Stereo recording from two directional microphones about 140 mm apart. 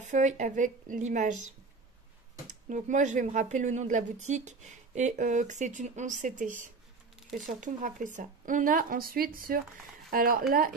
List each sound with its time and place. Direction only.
0.1 s speech: 60° right (ahead or behind)
2.7 s speech: 60° right (ahead or behind); by 10.4 s 90° right